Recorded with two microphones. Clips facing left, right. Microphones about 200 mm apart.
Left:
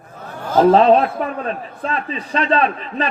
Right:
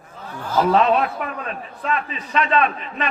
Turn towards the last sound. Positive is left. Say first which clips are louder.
# left 3 dB
turn(degrees=35)  # may be behind; listen again after turning